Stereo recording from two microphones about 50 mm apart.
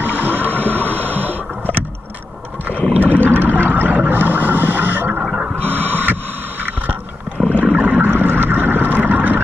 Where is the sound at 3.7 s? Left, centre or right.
Right.